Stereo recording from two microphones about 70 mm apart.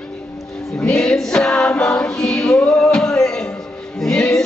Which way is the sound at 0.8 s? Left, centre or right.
Centre.